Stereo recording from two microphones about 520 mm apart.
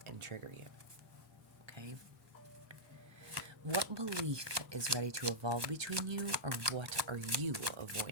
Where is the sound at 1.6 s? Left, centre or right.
Right.